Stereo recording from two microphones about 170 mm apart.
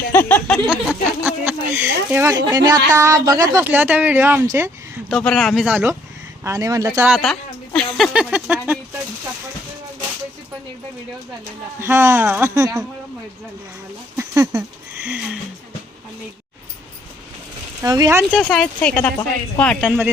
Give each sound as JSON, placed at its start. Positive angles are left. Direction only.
{"t": 0.1, "sound": "speech", "side_deg": 10}
{"t": 0.7, "sound": "speech", "side_deg": -5}
{"t": 5.0, "sound": "speech", "side_deg": 5}
{"t": 11.8, "sound": "speech", "side_deg": -15}
{"t": 14.2, "sound": "a sound", "side_deg": -20}
{"t": 15.0, "sound": "a sound", "side_deg": -10}
{"t": 17.8, "sound": "speech", "side_deg": -20}
{"t": 18.3, "sound": "speech", "side_deg": 5}